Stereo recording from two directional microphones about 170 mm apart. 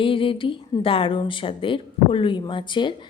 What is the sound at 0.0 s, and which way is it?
A woman's voice, 30° left (ahead or behind).